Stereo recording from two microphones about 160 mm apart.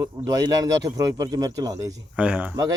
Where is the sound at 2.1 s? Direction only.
5° right (ahead or behind).